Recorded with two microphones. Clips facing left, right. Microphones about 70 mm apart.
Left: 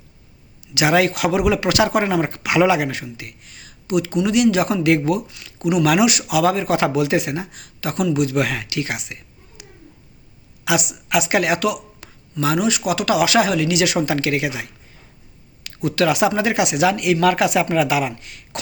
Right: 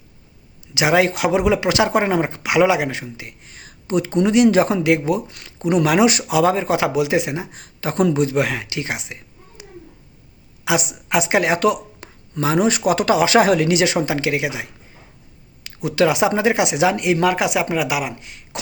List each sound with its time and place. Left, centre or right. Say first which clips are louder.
0.7 s speech: even; right
5.4 s speech: right 1 dB; right
9.6 s a sound: right 4 dB; right
10.7 s speech: even; right